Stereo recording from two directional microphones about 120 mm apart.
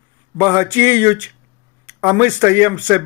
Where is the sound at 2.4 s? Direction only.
15° right (ahead or behind).